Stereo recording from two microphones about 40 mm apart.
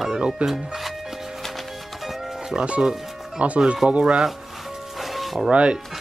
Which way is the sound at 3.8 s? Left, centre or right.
Right.